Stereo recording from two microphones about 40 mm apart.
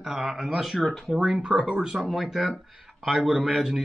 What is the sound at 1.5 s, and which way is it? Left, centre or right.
Speech, right.